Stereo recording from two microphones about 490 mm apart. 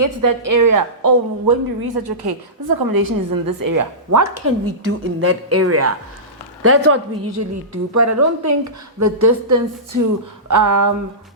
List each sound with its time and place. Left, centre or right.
0.0 s a woman's voice: right